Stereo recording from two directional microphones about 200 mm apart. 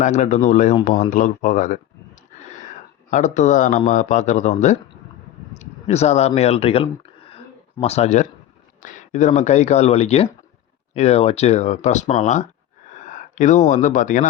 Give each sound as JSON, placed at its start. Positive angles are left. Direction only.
{"t": 0.0, "sound": "a man's voice", "side_deg": 35}
{"t": 3.1, "sound": "a man's voice", "side_deg": 40}
{"t": 7.3, "sound": "a sound", "side_deg": 30}
{"t": 8.8, "sound": "a man's voice", "side_deg": 40}